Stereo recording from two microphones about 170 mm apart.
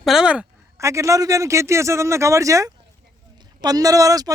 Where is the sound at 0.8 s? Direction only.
20° right (ahead or behind).